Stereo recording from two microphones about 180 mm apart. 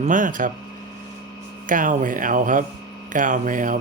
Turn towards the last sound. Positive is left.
turn(degrees=-45)  # may be behind; listen again after turning